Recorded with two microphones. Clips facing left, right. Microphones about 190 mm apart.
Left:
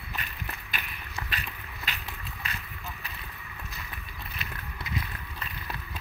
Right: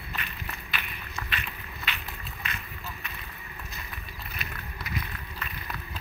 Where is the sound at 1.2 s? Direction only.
40° left (ahead or behind).